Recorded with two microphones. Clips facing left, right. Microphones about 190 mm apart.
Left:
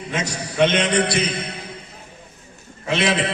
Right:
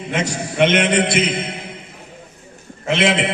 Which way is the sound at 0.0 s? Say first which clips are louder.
Right 4 dB; 25° right (ahead or behind).